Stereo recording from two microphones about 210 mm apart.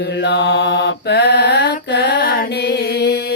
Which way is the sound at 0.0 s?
55° left (ahead or behind).